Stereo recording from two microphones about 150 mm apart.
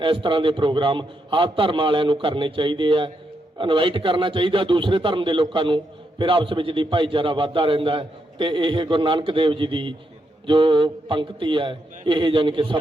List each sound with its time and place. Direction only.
0.0 s a man's voice: 35° right (ahead or behind)